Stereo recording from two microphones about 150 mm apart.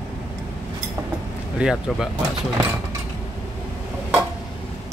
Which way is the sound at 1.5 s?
5° right (ahead or behind).